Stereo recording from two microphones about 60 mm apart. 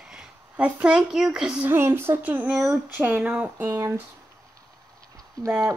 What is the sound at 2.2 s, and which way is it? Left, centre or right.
Speech, right.